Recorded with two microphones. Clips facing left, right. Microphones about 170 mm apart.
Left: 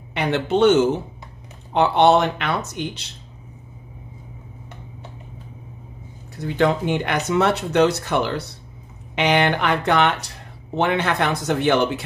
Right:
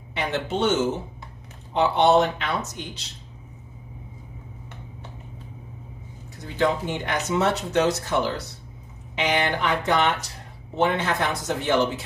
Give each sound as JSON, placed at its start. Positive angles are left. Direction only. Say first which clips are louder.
{"t": 0.1, "sound": "speech", "louder": "left 6 dB", "side_deg": 65}
{"t": 6.4, "sound": "speech", "louder": "left 4 dB", "side_deg": 65}